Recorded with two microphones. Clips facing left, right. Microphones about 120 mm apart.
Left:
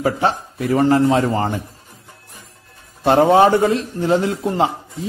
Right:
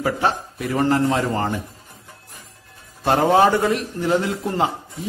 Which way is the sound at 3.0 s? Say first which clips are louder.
Left 4 dB; 25° left (ahead or behind).